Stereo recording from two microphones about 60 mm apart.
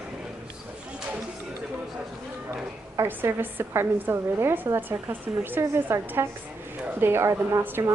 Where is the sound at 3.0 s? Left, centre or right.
Right.